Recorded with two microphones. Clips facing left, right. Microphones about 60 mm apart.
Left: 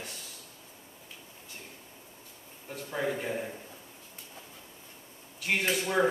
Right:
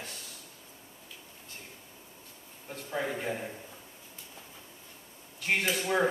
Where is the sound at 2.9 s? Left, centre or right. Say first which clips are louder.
Left 1 dB; centre.